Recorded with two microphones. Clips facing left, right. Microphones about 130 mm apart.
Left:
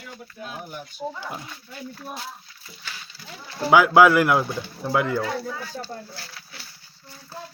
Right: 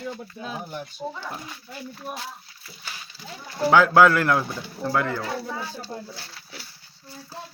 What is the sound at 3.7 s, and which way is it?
Speech, 10° left (ahead or behind).